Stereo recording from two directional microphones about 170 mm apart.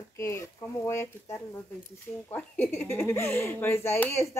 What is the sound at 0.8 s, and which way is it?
Speech, 15° left (ahead or behind).